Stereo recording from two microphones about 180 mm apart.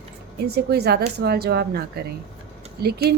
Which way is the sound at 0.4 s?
65° right (ahead or behind).